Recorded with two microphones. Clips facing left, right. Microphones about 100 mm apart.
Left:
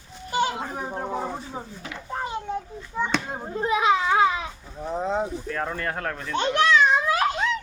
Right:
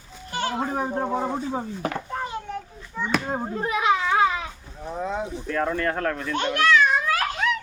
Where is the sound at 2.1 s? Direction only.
20° left (ahead or behind).